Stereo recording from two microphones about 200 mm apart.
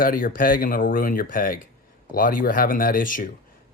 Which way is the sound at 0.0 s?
45° left (ahead or behind).